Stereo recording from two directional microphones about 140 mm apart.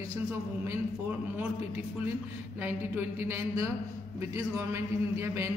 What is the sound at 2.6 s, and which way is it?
A man's voice, 15° right (ahead or behind).